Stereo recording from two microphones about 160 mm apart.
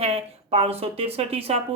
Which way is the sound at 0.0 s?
40° right (ahead or behind).